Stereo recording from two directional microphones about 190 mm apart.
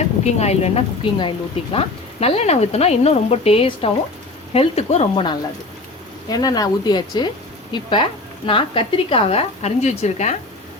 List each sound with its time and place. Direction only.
0.3 s speech: 35° left (ahead or behind)